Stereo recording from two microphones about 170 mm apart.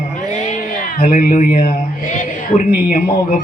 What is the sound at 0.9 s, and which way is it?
Speech, 60° left (ahead or behind).